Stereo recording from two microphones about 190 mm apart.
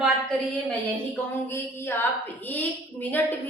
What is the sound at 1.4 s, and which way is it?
A woman's voice, 10° left (ahead or behind).